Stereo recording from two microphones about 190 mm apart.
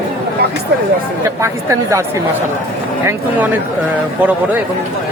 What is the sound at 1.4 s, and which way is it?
Speech, 15° right (ahead or behind).